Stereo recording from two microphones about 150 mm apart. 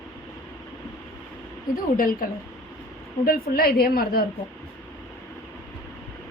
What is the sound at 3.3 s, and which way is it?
Speech, 85° left.